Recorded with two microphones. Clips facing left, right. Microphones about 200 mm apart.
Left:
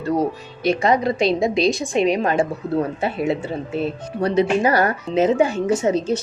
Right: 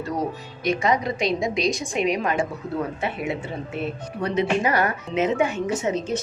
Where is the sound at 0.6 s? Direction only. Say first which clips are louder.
Left 4 dB; 30° left (ahead or behind).